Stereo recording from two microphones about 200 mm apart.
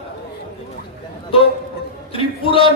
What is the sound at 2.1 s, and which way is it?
Speech, 25° left (ahead or behind).